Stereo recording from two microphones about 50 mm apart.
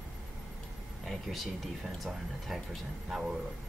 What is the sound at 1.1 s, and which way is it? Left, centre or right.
Speech, centre.